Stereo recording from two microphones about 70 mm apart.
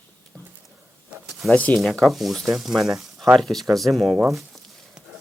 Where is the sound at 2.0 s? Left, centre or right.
Centre.